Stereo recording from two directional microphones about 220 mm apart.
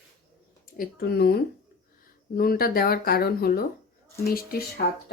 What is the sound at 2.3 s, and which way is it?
Speech, 45° left (ahead or behind).